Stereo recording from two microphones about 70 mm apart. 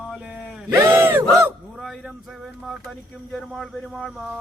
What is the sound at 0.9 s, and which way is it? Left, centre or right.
Battle cry, right.